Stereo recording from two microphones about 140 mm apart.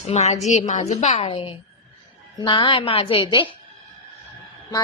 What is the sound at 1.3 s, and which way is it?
A woman's voice, 40° left (ahead or behind).